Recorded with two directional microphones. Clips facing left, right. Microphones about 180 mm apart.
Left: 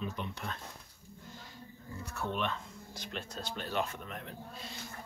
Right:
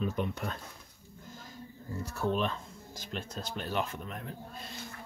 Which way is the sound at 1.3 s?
45° right (ahead or behind).